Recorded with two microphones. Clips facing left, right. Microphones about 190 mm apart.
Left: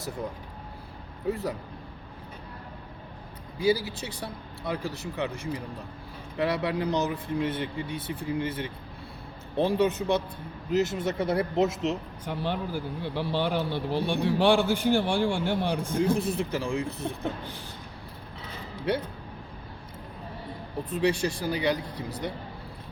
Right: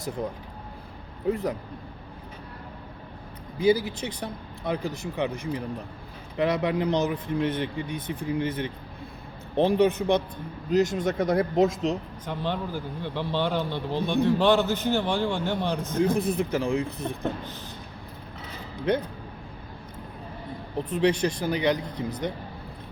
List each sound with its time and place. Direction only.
1.3 s speech: 20° right (ahead or behind)
3.6 s speech: 20° right (ahead or behind)
12.5 s a man's voice: 10° left (ahead or behind)
13.6 s speech: 15° right (ahead or behind)
13.9 s a man's voice: 10° left (ahead or behind)
16.1 s speech: 15° right (ahead or behind)
20.9 s speech: 20° right (ahead or behind)